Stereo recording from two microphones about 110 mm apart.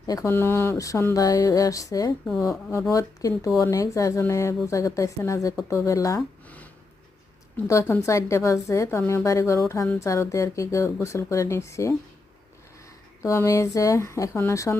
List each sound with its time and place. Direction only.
0.0 s speech: 35° left (ahead or behind)
0.3 s speech: 20° left (ahead or behind)
7.5 s a woman's voice: 20° left (ahead or behind)
13.2 s speech: 25° left (ahead or behind)